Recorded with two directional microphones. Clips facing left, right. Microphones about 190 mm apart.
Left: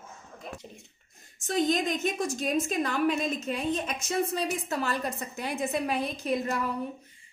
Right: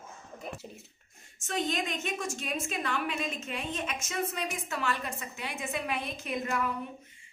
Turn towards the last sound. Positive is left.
turn(degrees=35)  # may be behind; listen again after turning